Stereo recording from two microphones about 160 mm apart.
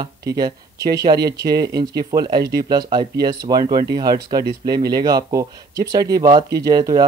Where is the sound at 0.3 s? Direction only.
25° right (ahead or behind).